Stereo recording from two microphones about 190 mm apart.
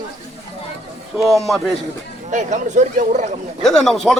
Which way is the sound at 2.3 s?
40° right (ahead or behind).